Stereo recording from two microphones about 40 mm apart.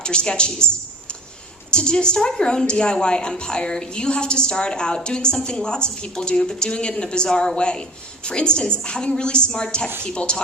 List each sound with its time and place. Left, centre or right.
0.0 s a woman's voice: left